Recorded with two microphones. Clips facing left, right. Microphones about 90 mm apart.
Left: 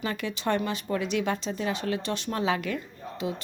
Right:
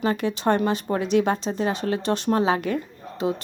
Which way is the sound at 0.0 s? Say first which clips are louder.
Right 7 dB; 35° right (ahead or behind).